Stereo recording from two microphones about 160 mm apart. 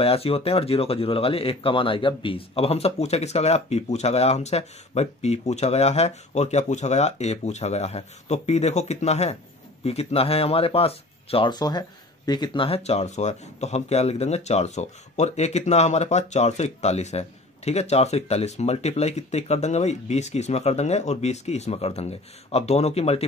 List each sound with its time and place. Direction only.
0.0 s speech: 40° left (ahead or behind)